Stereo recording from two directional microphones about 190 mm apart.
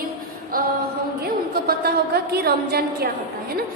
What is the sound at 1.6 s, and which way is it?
A woman's voice, 55° right (ahead or behind).